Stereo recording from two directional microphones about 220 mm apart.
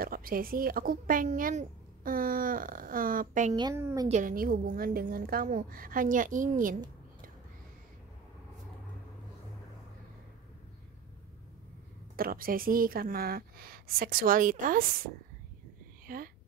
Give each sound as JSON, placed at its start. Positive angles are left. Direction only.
{"t": 0.0, "sound": "speech", "side_deg": -40}
{"t": 3.5, "sound": "a woman's voice", "side_deg": -15}
{"t": 4.1, "sound": "speech", "side_deg": -40}
{"t": 12.2, "sound": "speech", "side_deg": -40}
{"t": 16.1, "sound": "speech", "side_deg": -40}